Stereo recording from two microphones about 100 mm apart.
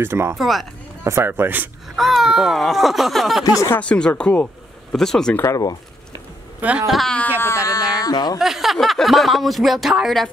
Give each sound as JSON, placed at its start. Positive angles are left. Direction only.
{"t": 0.0, "sound": "speech", "side_deg": -25}
{"t": 0.4, "sound": "speech", "side_deg": 0}
{"t": 1.0, "sound": "speech", "side_deg": -25}
{"t": 2.0, "sound": "speech", "side_deg": 0}
{"t": 3.8, "sound": "speech", "side_deg": 10}
{"t": 4.9, "sound": "speech", "side_deg": 5}
{"t": 5.5, "sound": "speech", "side_deg": 40}
{"t": 6.9, "sound": "speech", "side_deg": 0}
{"t": 7.3, "sound": "a sound", "side_deg": 25}
{"t": 8.0, "sound": "speech", "side_deg": 40}
{"t": 8.4, "sound": "speech", "side_deg": -5}